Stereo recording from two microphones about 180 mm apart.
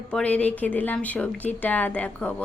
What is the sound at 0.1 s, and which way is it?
A woman's voice, 5° left (ahead or behind).